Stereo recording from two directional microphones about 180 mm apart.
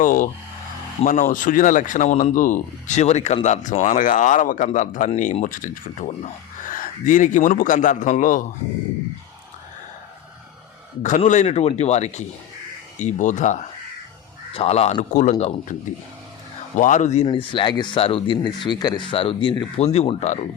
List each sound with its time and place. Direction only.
0.0 s speech: 50° left (ahead or behind)
11.3 s speech: 40° left (ahead or behind)
16.7 s speech: 45° left (ahead or behind)
17.2 s speech: 25° left (ahead or behind)